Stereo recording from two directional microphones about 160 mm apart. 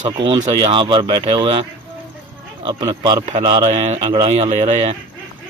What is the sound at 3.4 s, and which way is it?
Speech, 40° right (ahead or behind).